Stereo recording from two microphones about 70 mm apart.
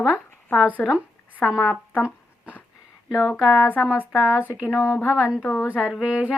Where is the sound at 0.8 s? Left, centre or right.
Centre.